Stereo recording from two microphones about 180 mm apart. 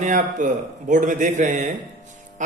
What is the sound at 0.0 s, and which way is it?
A man's voice, 45° right (ahead or behind).